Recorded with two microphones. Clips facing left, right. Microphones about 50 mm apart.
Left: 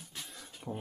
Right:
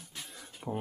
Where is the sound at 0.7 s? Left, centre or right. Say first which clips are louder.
Right 4 dB; right.